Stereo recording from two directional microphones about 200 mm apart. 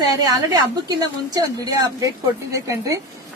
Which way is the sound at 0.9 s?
20° right (ahead or behind).